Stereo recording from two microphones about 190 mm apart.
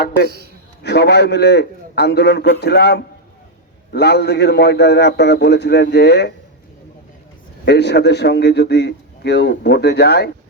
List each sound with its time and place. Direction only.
0.8 s a man's voice: 60° left (ahead or behind)
7.6 s a man's voice: 60° left (ahead or behind)